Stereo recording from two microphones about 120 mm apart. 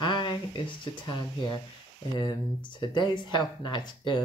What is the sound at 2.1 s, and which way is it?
Speech, 40° left (ahead or behind).